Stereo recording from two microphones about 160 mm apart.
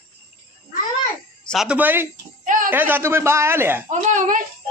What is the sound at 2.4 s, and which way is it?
Speech, 55° right (ahead or behind).